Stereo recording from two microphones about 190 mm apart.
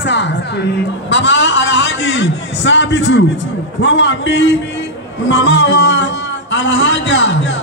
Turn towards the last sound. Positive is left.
turn(degrees=75)  # may be behind; listen again after turning